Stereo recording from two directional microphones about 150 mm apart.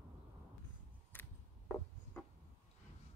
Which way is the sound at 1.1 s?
15° left (ahead or behind).